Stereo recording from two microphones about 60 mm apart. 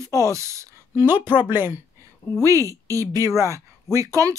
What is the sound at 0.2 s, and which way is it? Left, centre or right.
Speech, right.